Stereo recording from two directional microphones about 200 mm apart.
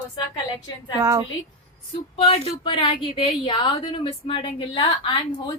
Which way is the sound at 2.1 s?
30° left (ahead or behind).